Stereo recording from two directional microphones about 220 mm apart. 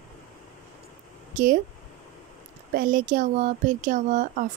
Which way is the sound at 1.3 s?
35° right (ahead or behind).